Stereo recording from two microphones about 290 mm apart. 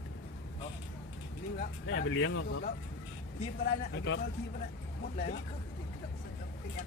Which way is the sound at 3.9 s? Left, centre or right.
Left.